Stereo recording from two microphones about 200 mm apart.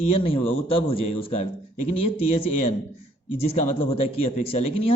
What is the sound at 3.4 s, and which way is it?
Speech, 30° left (ahead or behind).